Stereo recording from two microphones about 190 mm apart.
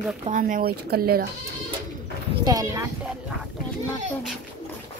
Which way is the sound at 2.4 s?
20° right (ahead or behind).